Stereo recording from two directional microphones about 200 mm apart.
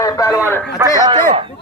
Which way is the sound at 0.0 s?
15° left (ahead or behind).